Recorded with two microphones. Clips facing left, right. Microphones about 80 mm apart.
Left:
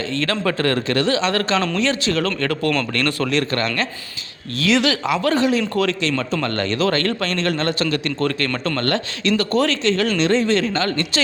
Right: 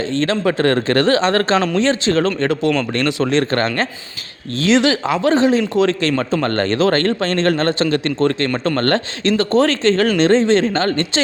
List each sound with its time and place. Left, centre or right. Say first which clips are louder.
0.2 s speech: right 4 dB; right
3.5 s speech: right 4 dB; right
6.0 s speech: right 4 dB; right